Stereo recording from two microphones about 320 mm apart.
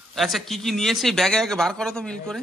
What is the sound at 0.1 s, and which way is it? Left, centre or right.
A man's voice, centre.